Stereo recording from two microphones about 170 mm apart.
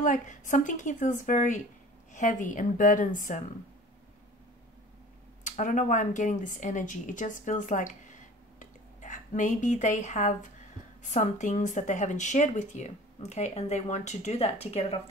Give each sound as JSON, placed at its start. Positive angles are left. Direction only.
{"t": 0.0, "sound": "speech", "side_deg": 50}
{"t": 5.4, "sound": "speech", "side_deg": 50}